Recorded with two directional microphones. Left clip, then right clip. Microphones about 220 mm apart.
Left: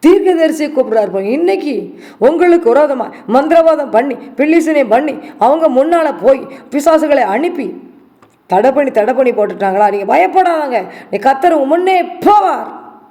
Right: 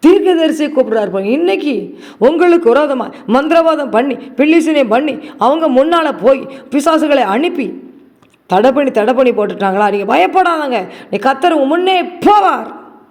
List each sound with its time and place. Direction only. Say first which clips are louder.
0.0 s a woman's voice: even; 15° right (ahead or behind)